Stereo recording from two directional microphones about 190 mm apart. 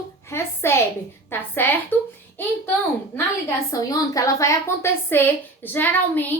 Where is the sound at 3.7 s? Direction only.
20° left (ahead or behind).